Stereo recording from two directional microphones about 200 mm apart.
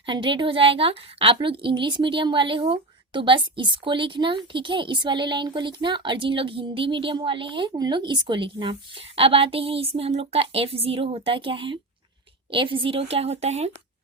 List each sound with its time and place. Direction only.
0.0 s a woman's voice: 25° right (ahead or behind)